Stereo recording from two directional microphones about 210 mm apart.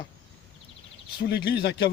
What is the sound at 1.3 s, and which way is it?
Speech, 50° left (ahead or behind).